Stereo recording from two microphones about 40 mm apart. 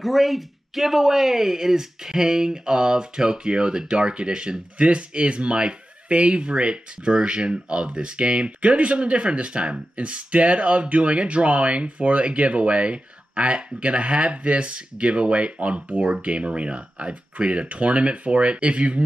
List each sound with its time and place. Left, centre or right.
0.0 s speech: centre; by 19.0 s right